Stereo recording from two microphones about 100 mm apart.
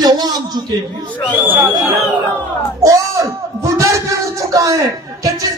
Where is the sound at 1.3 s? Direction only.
15° right (ahead or behind).